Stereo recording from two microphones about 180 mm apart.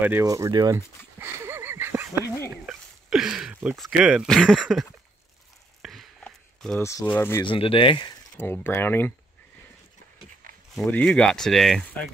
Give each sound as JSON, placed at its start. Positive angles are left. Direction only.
{"t": 0.0, "sound": "speech", "side_deg": -15}
{"t": 1.2, "sound": "a sound", "side_deg": -15}
{"t": 2.6, "sound": "speech", "side_deg": -5}
{"t": 5.8, "sound": "a sound", "side_deg": 0}
{"t": 6.8, "sound": "speech", "side_deg": 15}
{"t": 7.4, "sound": "speech", "side_deg": 30}
{"t": 8.4, "sound": "speech", "side_deg": 10}
{"t": 10.7, "sound": "speech", "side_deg": 5}